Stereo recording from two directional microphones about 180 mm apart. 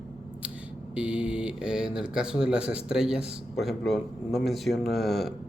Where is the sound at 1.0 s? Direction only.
5° right (ahead or behind).